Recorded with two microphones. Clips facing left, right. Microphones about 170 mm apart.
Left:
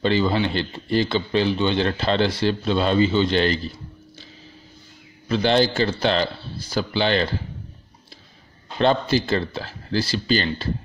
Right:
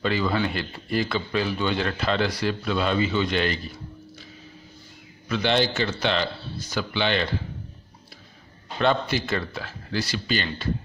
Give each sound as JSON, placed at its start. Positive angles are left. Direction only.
{"t": 0.0, "sound": "a man's voice", "side_deg": 30}
{"t": 5.3, "sound": "speech", "side_deg": 35}
{"t": 8.7, "sound": "speech", "side_deg": 30}